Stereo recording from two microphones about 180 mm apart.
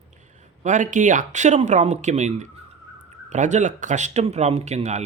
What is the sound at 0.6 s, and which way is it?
Speech, 45° right (ahead or behind).